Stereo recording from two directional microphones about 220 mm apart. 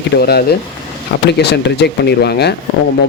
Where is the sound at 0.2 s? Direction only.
45° left (ahead or behind).